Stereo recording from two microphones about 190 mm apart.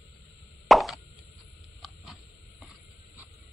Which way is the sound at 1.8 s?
Centre (ahead or behind).